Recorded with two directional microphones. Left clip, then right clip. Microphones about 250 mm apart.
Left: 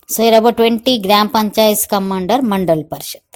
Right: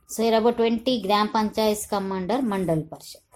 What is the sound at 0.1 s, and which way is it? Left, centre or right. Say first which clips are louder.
A woman's voice: left 10 dB; left.